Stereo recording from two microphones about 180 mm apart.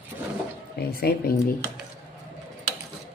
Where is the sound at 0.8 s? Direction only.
60° left (ahead or behind).